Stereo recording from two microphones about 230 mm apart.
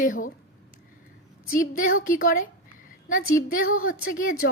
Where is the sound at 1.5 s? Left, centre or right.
Left.